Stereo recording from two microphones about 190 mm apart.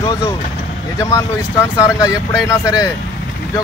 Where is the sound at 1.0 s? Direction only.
15° left (ahead or behind).